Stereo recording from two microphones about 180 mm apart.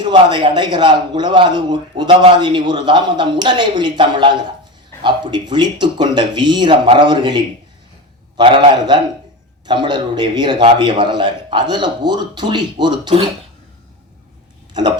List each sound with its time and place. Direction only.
0.0 s a man's voice: 25° right (ahead or behind)
14.7 s hiccup: 25° right (ahead or behind)